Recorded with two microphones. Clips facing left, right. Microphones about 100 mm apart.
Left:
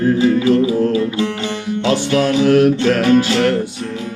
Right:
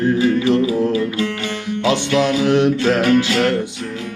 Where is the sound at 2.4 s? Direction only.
20° right (ahead or behind).